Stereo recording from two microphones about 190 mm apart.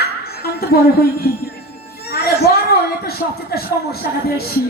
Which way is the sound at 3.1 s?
55° left (ahead or behind).